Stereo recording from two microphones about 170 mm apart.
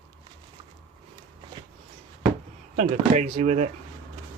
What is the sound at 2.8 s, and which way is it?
Speech, 45° right (ahead or behind).